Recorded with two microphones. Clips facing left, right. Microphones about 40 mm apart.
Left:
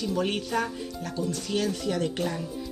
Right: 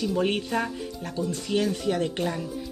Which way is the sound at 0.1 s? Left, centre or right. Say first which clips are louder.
Even; centre.